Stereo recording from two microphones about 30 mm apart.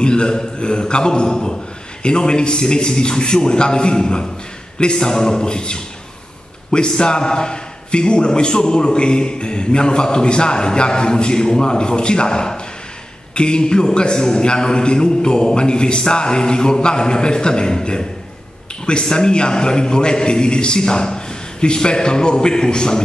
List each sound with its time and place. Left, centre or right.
0.0 s a man's voice: left
19.0 s a man's voice: left